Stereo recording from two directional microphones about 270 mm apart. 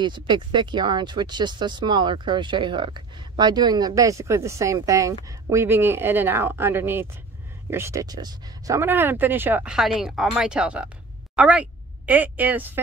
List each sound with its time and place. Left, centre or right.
0.0 s a woman's voice: centre